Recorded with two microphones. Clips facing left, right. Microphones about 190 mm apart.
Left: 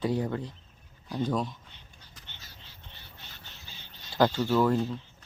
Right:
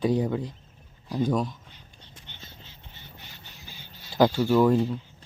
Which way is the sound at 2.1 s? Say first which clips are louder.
Right 5 dB; 25° right (ahead or behind).